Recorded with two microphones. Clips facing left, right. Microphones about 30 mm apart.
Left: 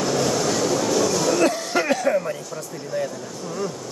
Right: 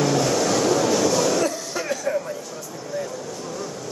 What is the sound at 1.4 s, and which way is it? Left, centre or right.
Cough, left.